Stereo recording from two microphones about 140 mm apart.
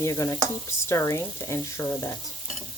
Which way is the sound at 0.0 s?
20° left (ahead or behind).